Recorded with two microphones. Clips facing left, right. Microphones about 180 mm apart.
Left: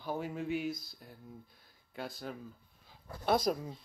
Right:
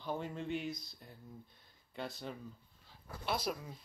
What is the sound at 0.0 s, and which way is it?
Speech, 5° left (ahead or behind).